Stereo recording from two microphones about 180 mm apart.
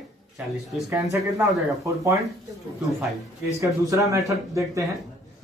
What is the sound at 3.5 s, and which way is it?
Speech, 20° right (ahead or behind).